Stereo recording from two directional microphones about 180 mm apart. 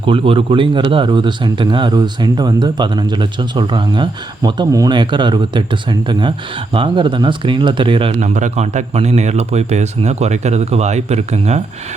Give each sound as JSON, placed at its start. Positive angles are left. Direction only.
{"t": 0.0, "sound": "a man's voice", "side_deg": -30}
{"t": 8.2, "sound": "speech", "side_deg": -40}